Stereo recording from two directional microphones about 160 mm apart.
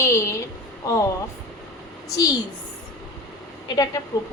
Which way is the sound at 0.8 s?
20° left (ahead or behind).